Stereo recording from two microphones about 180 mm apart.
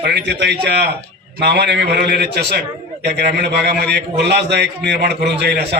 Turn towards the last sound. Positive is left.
turn(degrees=-70)  # may be behind; listen again after turning